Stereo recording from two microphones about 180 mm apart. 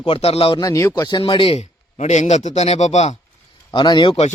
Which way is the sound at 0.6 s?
20° left (ahead or behind).